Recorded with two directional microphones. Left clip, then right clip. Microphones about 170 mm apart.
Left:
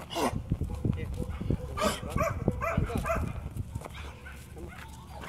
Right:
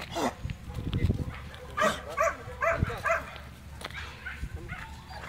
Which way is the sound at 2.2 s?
45° left (ahead or behind).